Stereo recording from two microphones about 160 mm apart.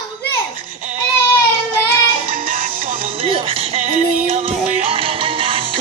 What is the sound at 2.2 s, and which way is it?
Music, 55° right (ahead or behind).